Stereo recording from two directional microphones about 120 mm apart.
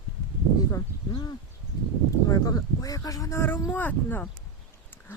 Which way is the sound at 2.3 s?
30° left (ahead or behind).